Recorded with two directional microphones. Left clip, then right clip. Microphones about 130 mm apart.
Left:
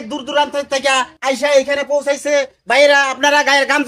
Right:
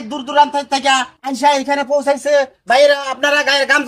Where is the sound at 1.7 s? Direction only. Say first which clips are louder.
Right 1 dB; 15° left (ahead or behind).